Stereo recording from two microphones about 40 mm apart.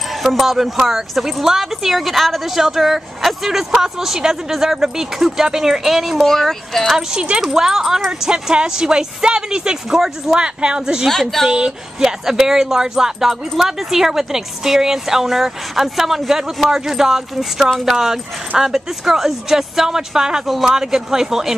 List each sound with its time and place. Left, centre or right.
0.1 s speech: centre
6.2 s speech: centre
7.0 s speech: centre
9.9 s speech: centre
10.4 s speech: right
11.1 s speech: centre
11.4 s speech: centre
20.4 s speech: centre
20.7 s speech: centre